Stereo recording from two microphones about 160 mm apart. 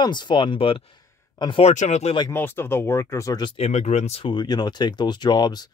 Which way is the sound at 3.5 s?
40° left (ahead or behind).